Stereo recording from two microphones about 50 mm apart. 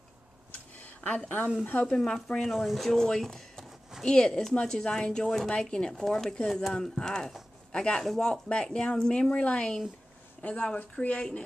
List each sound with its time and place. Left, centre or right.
0.7 s a sound: left
1.9 s speech: centre
2.4 s a man's voice: centre
8.0 s speech: centre
8.3 s speech: centre